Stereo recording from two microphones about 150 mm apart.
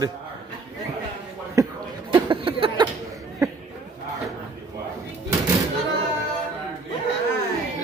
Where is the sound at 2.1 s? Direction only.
35° right (ahead or behind).